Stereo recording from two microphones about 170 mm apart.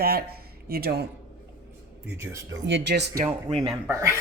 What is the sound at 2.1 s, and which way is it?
Speech, 15° right (ahead or behind).